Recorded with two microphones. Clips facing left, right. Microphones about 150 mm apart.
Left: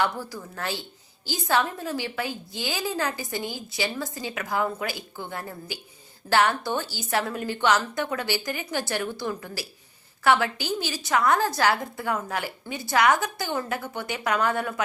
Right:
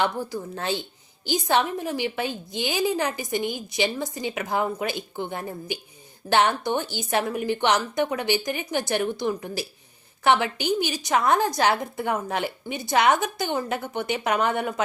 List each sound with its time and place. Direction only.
0.0 s a woman's voice: 20° right (ahead or behind)